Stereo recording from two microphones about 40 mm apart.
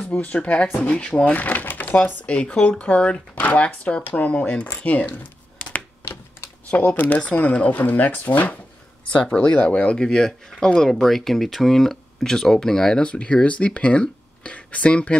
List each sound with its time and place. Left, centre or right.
0.2 s speech: left
0.8 s speech: left
1.2 s speech: left
2.2 s speech: left
6.7 s speech: left
9.0 s speech: left
9.9 s speech: centre
10.9 s speech: centre
13.0 s speech: left